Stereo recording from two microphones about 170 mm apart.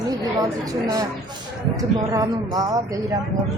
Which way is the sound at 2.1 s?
20° right (ahead or behind).